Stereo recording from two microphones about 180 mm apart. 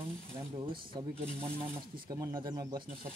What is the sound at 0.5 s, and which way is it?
Speech, 30° right (ahead or behind).